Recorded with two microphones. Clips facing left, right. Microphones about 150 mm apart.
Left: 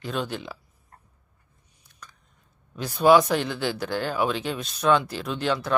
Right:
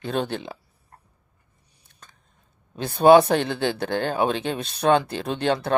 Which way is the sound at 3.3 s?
30° right (ahead or behind).